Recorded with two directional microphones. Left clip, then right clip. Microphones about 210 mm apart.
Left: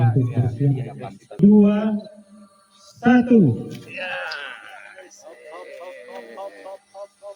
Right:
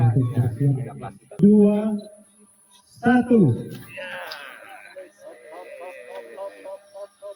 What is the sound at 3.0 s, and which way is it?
Speech, 50° left (ahead or behind).